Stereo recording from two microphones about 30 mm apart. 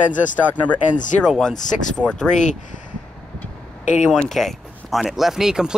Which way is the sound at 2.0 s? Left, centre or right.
Right.